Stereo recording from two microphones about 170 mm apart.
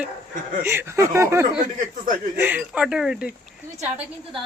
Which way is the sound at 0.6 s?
15° right (ahead or behind).